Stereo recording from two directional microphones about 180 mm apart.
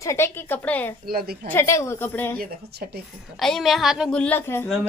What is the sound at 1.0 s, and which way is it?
Speech, 60° right (ahead or behind).